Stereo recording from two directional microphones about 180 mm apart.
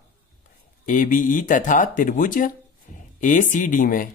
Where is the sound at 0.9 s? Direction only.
45° left (ahead or behind).